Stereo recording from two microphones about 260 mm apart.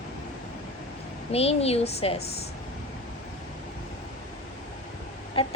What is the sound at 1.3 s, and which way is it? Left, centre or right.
Speech, left.